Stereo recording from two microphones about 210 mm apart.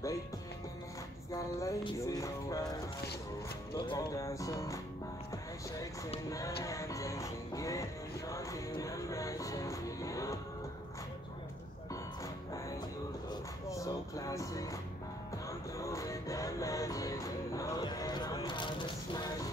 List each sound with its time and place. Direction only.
1.3 s music: 15° left (ahead or behind)
3.7 s music: 20° left (ahead or behind)
6.6 s music: 15° left (ahead or behind)
13.3 s music: 15° left (ahead or behind)
15.8 s music: 15° left (ahead or behind)